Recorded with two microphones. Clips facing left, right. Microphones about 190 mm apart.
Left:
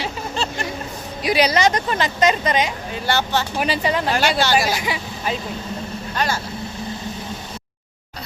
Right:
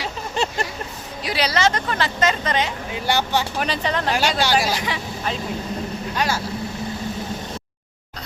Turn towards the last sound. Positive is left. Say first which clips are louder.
# even
turn(degrees=-10)  # may be behind; listen again after turning